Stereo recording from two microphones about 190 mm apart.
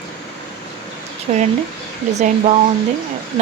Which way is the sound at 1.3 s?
35° right (ahead or behind).